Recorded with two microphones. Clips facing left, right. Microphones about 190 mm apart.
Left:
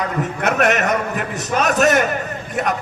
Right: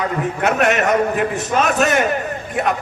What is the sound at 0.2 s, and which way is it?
A man's voice, 40° left (ahead or behind).